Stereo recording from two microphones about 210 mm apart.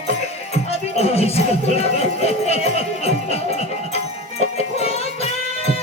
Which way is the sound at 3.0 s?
30° left (ahead or behind).